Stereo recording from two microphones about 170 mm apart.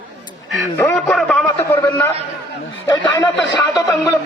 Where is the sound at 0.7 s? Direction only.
5° left (ahead or behind).